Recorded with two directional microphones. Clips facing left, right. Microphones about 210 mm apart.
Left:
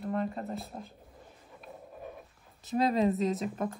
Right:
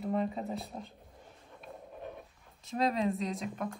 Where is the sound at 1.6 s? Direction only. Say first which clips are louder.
Even; centre (ahead or behind).